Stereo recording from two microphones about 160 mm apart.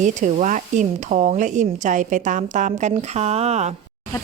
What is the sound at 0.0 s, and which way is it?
Speech, 50° right (ahead or behind).